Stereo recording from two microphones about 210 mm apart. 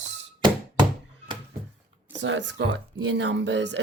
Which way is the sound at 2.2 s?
60° right (ahead or behind).